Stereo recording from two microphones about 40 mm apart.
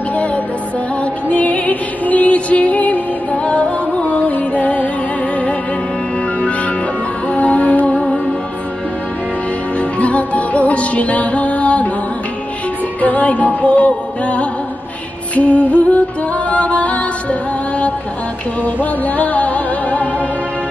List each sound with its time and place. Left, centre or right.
1.3 s music: left
3.4 s music: left
7.2 s music: left
9.8 s music: left
13.0 s music: left
18.6 s music: left